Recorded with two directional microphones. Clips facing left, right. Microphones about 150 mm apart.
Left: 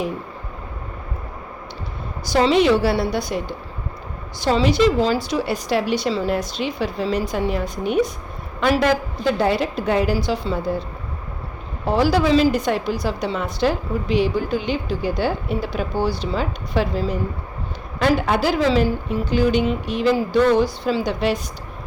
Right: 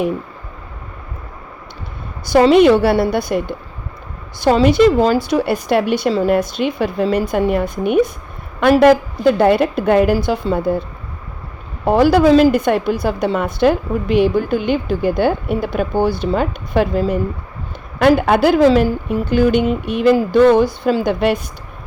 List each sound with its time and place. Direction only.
2.2 s a woman's voice: 55° right (ahead or behind)
11.9 s a woman's voice: 55° right (ahead or behind)